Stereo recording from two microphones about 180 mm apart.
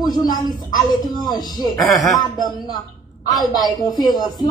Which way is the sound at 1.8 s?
Centre (ahead or behind).